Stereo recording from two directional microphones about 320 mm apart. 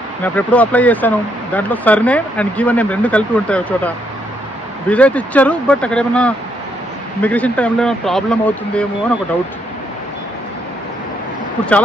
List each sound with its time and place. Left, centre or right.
0.2 s speech: centre